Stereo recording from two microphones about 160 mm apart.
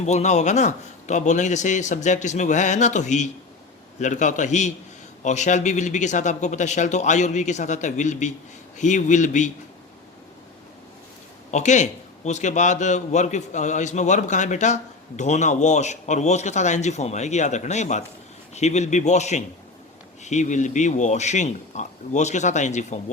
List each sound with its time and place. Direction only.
0.0 s a man's voice: 45° left (ahead or behind)
11.5 s a man's voice: 50° left (ahead or behind)